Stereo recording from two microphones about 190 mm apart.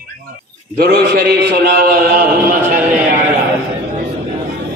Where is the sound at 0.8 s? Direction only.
55° right (ahead or behind).